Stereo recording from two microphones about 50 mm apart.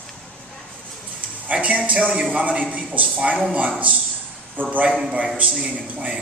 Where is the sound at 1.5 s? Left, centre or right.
Right.